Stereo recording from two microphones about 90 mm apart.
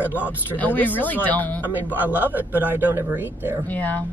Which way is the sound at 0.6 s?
20° left (ahead or behind).